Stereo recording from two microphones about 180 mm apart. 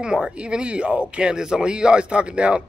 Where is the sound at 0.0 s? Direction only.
5° right (ahead or behind).